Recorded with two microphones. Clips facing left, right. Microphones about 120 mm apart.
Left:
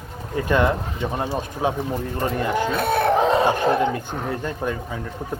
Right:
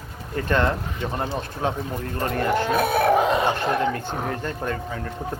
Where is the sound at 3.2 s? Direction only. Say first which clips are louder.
Left 3 dB; 30° left (ahead or behind).